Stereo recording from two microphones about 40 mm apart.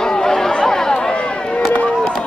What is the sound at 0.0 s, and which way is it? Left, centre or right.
Chatter, centre.